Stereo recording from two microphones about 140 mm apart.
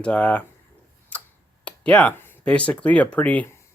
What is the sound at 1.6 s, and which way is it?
Speech, 10° left (ahead or behind).